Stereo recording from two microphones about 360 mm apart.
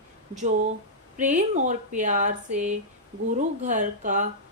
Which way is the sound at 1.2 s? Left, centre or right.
Right.